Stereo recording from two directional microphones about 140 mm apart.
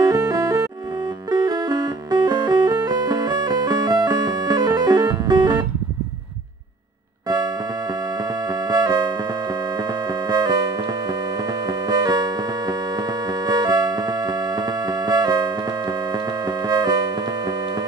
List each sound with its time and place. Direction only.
0.0 s music: 25° right (ahead or behind)
8.6 s music: 25° right (ahead or behind)
10.3 s music: 30° right (ahead or behind)
11.9 s music: 30° right (ahead or behind)